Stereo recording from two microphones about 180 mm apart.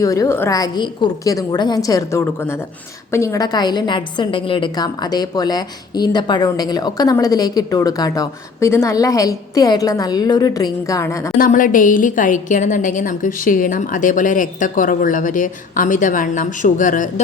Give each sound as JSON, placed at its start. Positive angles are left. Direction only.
{"t": 0.0, "sound": "a woman's voice", "side_deg": 20}
{"t": 11.3, "sound": "a woman's voice", "side_deg": 50}